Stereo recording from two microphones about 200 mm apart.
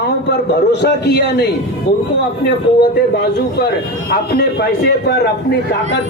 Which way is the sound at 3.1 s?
55° left (ahead or behind).